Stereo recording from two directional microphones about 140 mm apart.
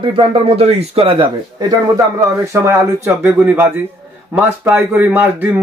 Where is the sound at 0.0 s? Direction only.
35° right (ahead or behind); by 3.7 s 15° right (ahead or behind).